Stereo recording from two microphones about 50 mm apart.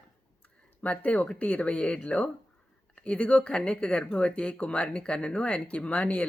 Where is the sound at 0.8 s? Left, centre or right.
Left.